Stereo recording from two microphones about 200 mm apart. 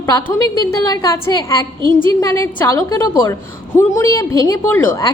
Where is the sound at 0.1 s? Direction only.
20° left (ahead or behind).